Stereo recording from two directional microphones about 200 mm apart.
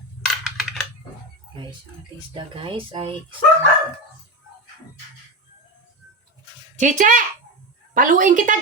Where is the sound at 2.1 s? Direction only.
25° right (ahead or behind).